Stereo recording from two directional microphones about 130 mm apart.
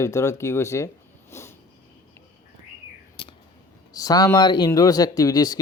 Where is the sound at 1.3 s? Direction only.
20° left (ahead or behind).